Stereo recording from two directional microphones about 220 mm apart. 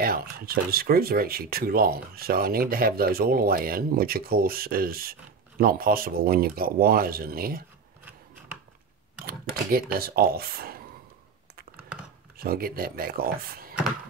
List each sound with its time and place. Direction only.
0.0 s speech: 40° right (ahead or behind)
9.2 s speech: 40° right (ahead or behind)
12.4 s speech: 40° right (ahead or behind)